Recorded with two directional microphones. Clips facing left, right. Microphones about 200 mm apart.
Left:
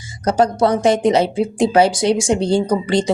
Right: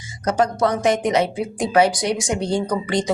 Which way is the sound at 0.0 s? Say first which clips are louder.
Left 4 dB; 35° left (ahead or behind).